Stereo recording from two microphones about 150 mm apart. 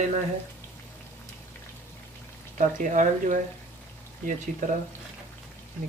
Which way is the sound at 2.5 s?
60° right (ahead or behind).